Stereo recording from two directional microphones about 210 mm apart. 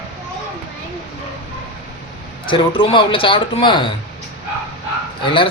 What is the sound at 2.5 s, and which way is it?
Speech, 25° left (ahead or behind).